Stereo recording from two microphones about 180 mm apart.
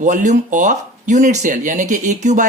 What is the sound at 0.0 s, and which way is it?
Speech, 45° right (ahead or behind).